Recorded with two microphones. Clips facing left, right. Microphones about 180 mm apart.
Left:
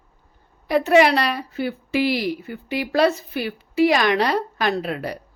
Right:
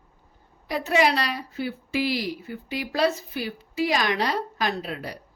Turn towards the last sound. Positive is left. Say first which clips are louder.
# left 6 dB
turn(degrees=65)  # may be behind; listen again after turning